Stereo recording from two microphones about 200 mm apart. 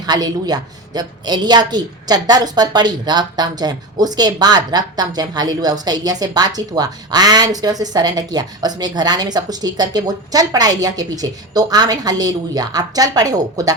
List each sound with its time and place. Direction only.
0.0 s a man's voice: 20° right (ahead or behind)